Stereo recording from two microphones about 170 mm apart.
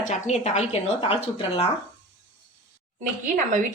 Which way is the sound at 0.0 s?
45° left (ahead or behind).